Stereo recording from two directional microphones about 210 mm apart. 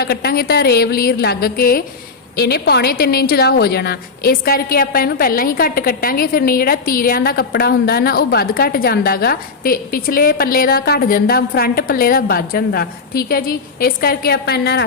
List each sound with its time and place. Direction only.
0.0 s a woman's voice: 50° left (ahead or behind)